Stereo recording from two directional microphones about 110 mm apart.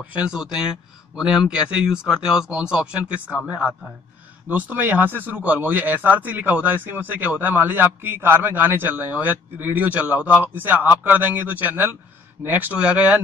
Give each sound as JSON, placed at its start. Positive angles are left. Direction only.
{"t": 0.0, "sound": "speech", "side_deg": -15}
{"t": 4.5, "sound": "speech", "side_deg": -15}